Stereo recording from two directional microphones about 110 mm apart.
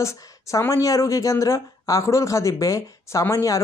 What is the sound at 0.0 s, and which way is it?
Speech, 25° left (ahead or behind).